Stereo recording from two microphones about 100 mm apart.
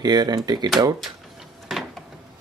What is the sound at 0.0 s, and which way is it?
Speech, 45° right (ahead or behind).